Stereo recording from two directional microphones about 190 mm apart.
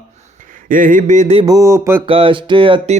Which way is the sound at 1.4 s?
15° right (ahead or behind).